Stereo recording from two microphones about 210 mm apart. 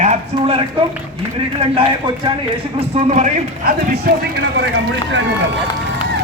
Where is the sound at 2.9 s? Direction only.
30° right (ahead or behind).